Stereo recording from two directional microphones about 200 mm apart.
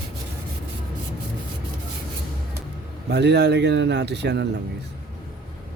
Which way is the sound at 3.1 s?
55° right (ahead or behind).